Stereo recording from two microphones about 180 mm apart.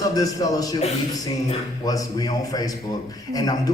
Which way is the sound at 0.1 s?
20° left (ahead or behind).